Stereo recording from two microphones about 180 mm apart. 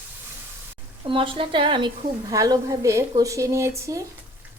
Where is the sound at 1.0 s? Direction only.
30° right (ahead or behind).